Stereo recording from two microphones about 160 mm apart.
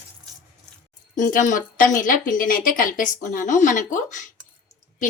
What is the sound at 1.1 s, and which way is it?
A woman's voice, 55° left (ahead or behind).